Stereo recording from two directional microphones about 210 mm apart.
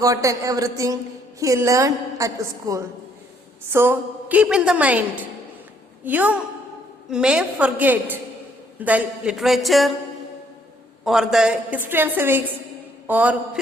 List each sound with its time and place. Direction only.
0.0 s a woman's voice: 15° right (ahead or behind); by 9.9 s centre (ahead or behind)
11.0 s a woman's voice: centre (ahead or behind)